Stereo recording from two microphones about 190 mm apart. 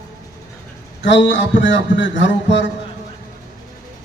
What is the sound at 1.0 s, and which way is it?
A man's voice, 70° left (ahead or behind).